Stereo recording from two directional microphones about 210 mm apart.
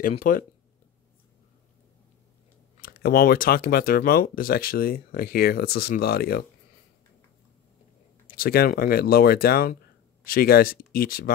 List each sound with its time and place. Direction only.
0.2 s speech: 40° left (ahead or behind)
2.8 s speech: 45° left (ahead or behind)
8.4 s speech: 45° left (ahead or behind)